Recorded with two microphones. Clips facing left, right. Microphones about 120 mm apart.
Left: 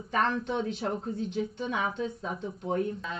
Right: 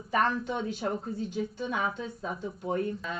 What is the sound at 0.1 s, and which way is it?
A woman's voice, 5° right (ahead or behind).